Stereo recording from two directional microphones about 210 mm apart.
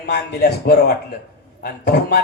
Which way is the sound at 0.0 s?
50° left (ahead or behind).